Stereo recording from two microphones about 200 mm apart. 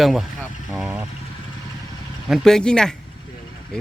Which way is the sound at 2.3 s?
Centre (ahead or behind).